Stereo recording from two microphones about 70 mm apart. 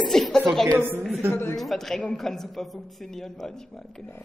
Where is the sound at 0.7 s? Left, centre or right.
Right.